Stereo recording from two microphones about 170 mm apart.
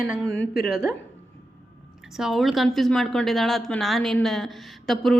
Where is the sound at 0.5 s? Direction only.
75° left (ahead or behind).